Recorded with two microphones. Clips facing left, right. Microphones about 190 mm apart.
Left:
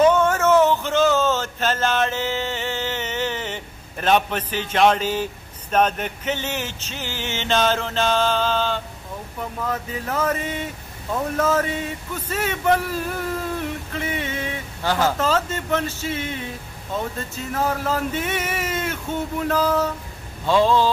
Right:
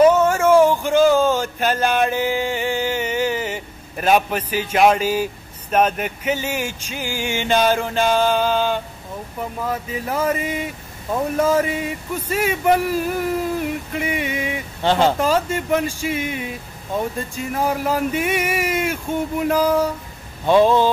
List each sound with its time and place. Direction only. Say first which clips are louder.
0.0 s speech: right 3 dB; 10° right (ahead or behind)
14.8 s speech: right 4 dB; 25° right (ahead or behind)
15.1 s speech: right 3 dB; 10° right (ahead or behind)